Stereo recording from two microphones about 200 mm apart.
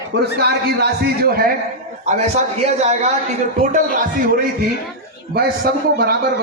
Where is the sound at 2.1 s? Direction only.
35° right (ahead or behind).